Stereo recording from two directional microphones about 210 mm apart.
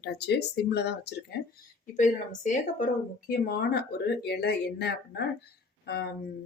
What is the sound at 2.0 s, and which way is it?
Speech, 35° left (ahead or behind).